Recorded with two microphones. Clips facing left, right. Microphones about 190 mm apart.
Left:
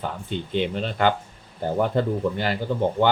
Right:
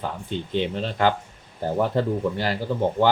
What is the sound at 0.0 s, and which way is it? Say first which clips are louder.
Speech: even; centre (ahead or behind).